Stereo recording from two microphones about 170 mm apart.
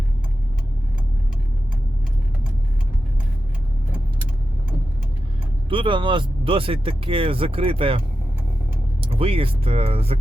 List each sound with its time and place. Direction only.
5.6 s speech: 30° right (ahead or behind)